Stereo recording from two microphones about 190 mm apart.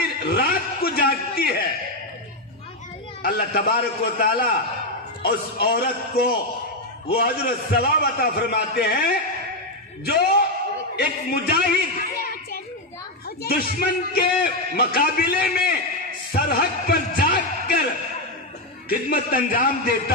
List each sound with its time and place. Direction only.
0.0 s chuckle: 50° left (ahead or behind)
3.2 s a man's voice: 50° left (ahead or behind)
13.4 s a man's voice: 50° left (ahead or behind)
16.3 s a sound: 55° left (ahead or behind)
18.9 s a man's voice: 50° left (ahead or behind)